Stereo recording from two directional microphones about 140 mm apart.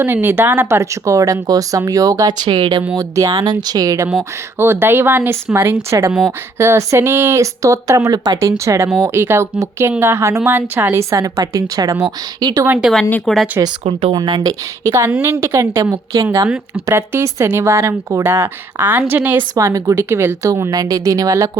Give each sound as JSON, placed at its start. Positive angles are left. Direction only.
{"t": 0.0, "sound": "speech", "side_deg": -15}
{"t": 12.6, "sound": "speech", "side_deg": -15}
{"t": 13.1, "sound": "speech", "side_deg": 10}
{"t": 13.8, "sound": "speech", "side_deg": -40}
{"t": 14.2, "sound": "speech", "side_deg": -30}
{"t": 19.5, "sound": "speech", "side_deg": -25}